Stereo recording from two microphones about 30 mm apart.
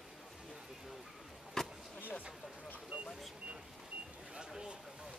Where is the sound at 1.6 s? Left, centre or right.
Centre.